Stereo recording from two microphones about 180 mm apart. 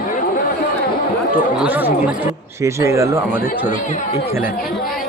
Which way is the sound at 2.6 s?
15° right (ahead or behind).